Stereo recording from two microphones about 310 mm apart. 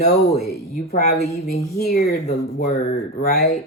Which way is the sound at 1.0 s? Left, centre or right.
Left.